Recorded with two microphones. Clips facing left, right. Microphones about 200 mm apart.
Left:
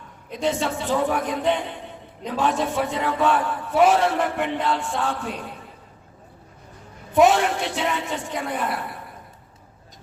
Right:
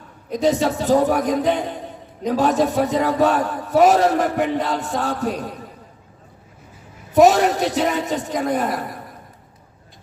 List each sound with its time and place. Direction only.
0.3 s a man's voice: 40° right (ahead or behind)
7.1 s a man's voice: 40° right (ahead or behind)